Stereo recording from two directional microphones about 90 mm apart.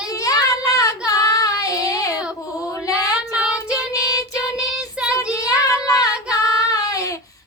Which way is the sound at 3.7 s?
40° left (ahead or behind).